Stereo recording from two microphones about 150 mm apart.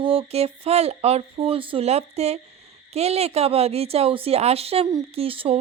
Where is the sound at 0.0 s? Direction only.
35° right (ahead or behind).